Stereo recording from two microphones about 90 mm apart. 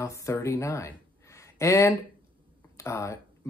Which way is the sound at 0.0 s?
35° left (ahead or behind).